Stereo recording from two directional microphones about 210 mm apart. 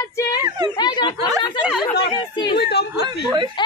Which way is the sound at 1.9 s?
25° left (ahead or behind).